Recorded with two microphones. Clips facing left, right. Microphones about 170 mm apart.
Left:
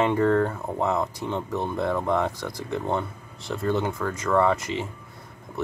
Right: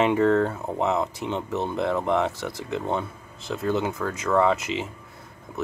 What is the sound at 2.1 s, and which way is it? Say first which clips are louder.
Speech: right 1 dB; 5° right (ahead or behind).